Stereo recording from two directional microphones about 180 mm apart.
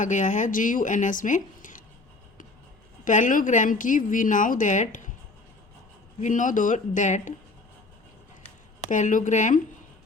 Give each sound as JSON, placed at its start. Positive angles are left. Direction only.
{"t": 0.0, "sound": "a woman's voice", "side_deg": 45}
{"t": 3.0, "sound": "a woman's voice", "side_deg": 45}
{"t": 6.1, "sound": "a woman's voice", "side_deg": 45}
{"t": 8.9, "sound": "a woman's voice", "side_deg": 45}